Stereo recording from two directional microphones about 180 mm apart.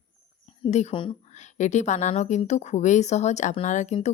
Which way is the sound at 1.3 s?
40° left (ahead or behind).